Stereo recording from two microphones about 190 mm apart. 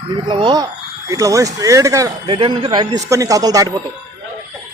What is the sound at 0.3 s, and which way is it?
Speech, 25° right (ahead or behind).